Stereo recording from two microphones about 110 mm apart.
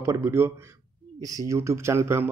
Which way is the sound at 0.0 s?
25° right (ahead or behind).